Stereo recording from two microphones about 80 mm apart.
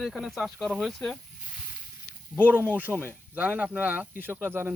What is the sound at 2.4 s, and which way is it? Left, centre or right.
Speech, right.